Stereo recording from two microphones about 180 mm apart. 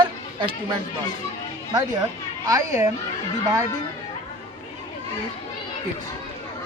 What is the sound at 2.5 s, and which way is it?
Speech, 20° right (ahead or behind).